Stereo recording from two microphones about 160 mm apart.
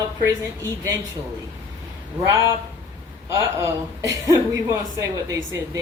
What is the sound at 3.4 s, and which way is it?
A woman's voice, 20° right (ahead or behind).